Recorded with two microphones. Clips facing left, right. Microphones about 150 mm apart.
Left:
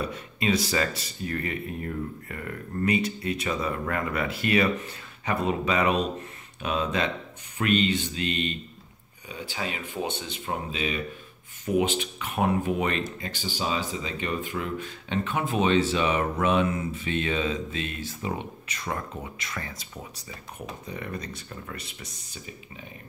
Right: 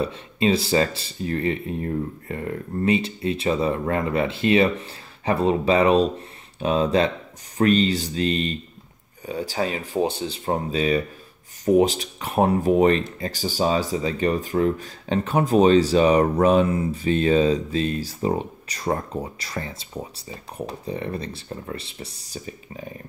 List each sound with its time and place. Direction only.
0.0 s speech: 30° right (ahead or behind)